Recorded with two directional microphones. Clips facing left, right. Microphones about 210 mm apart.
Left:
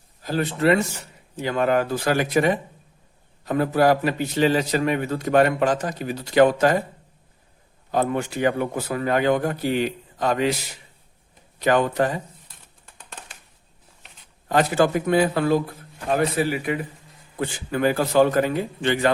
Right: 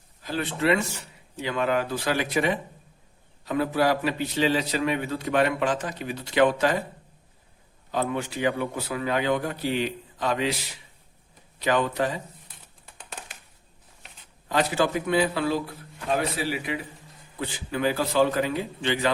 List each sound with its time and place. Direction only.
0.2 s a man's voice: 40° left (ahead or behind)
7.9 s a man's voice: 45° left (ahead or behind)
11.6 s a man's voice: 50° left (ahead or behind)
14.4 s a man's voice: 50° left (ahead or behind)